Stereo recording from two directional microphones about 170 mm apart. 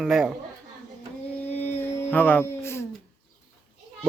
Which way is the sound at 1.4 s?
10° left (ahead or behind).